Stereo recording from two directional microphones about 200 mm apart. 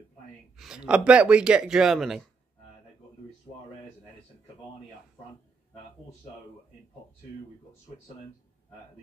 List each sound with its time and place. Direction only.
0.6 s speech: 5° right (ahead or behind)